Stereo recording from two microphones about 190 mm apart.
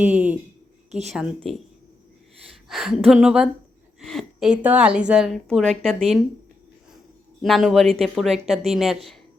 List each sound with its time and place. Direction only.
0.9 s a woman's voice: 35° right (ahead or behind)
1.1 s speech: centre (ahead or behind)
2.6 s speech: centre (ahead or behind)
4.0 s a sound: centre (ahead or behind)
4.6 s speech: 5° right (ahead or behind)
7.4 s speech: centre (ahead or behind)